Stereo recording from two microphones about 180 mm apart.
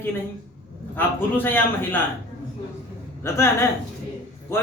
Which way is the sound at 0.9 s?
10° left (ahead or behind).